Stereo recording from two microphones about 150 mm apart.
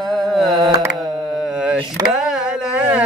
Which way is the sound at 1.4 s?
5° right (ahead or behind).